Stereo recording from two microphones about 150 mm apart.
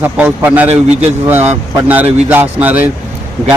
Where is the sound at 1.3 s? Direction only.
15° right (ahead or behind).